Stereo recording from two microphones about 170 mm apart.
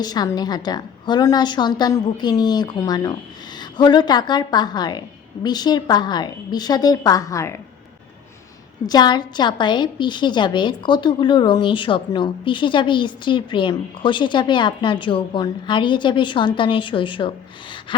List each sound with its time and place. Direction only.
0.0 s a woman's voice: 25° left (ahead or behind)
8.9 s a woman's voice: 25° left (ahead or behind)